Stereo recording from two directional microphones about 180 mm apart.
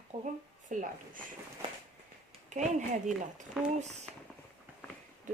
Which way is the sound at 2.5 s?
40° right (ahead or behind).